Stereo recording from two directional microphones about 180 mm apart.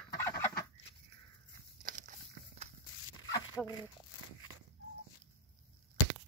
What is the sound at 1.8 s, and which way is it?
Walk, 45° right (ahead or behind).